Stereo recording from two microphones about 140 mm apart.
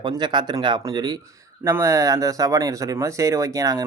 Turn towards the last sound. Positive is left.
turn(degrees=-25)  # may be behind; listen again after turning